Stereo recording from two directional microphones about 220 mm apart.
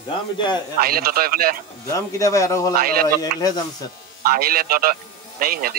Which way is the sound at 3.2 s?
15° left (ahead or behind).